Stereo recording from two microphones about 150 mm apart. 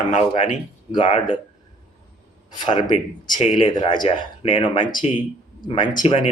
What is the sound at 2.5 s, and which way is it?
A man's voice, 30° left (ahead or behind).